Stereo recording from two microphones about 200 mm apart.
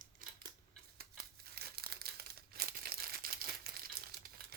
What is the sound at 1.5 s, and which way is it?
Crumpling, 50° right (ahead or behind).